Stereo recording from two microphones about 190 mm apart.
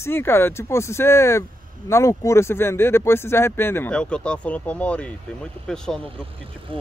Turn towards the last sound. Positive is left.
turn(degrees=5)  # may be behind; listen again after turning